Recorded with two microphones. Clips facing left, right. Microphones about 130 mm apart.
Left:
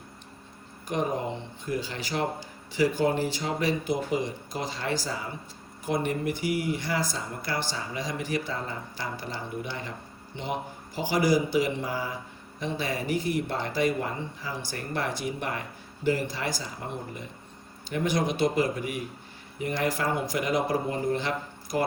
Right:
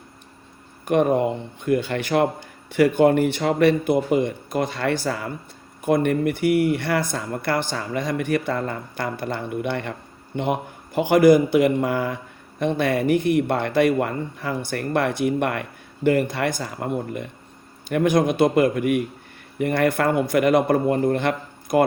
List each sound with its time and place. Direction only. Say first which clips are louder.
0.9 s speech: right 10 dB; 60° right (ahead or behind)